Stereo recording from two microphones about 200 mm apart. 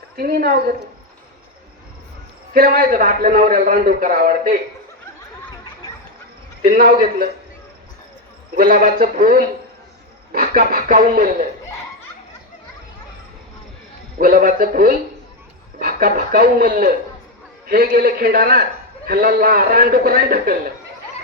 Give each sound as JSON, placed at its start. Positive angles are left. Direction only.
{"t": 0.2, "sound": "a man's voice", "side_deg": -50}
{"t": 2.5, "sound": "a man's voice", "side_deg": -45}
{"t": 6.6, "sound": "a man's voice", "side_deg": -45}
{"t": 8.5, "sound": "a man's voice", "side_deg": -45}
{"t": 14.2, "sound": "a man's voice", "side_deg": -45}